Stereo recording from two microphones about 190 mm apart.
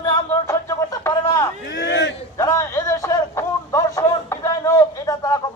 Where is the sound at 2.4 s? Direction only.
15° left (ahead or behind).